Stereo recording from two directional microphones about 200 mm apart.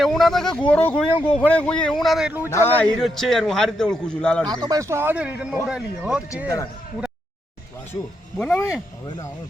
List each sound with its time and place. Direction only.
0.0 s a man's voice: centre (ahead or behind)
1.1 s speech: 25° left (ahead or behind)
1.4 s a man's voice: 5° left (ahead or behind)
2.5 s a man's voice: 10° left (ahead or behind)
4.4 s a man's voice: 20° right (ahead or behind)
8.4 s a man's voice: centre (ahead or behind)